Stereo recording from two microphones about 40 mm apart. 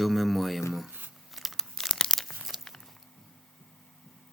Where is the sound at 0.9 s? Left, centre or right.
Right.